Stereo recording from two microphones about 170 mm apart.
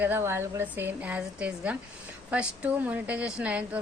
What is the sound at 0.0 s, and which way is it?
A woman's voice, 15° right (ahead or behind).